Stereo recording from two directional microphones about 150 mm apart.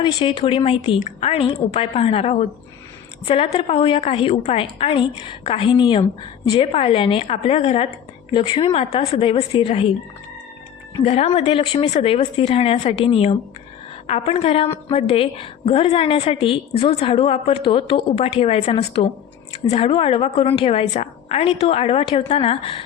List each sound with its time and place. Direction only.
0.0 s a woman's voice: 35° left (ahead or behind)
11.0 s a woman's voice: 45° left (ahead or behind)